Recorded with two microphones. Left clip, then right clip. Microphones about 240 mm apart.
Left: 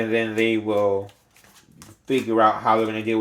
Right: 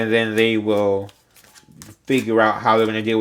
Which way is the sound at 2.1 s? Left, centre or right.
Right.